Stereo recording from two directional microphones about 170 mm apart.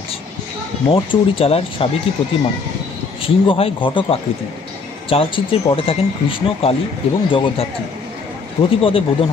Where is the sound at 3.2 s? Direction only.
35° left (ahead or behind).